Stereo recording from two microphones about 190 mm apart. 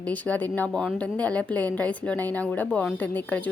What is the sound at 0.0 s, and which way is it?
A woman's voice, 10° left (ahead or behind).